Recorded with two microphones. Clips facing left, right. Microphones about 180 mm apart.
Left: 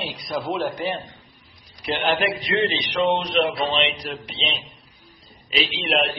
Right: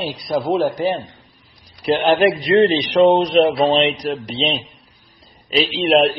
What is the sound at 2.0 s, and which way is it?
A man's voice, 40° right (ahead or behind).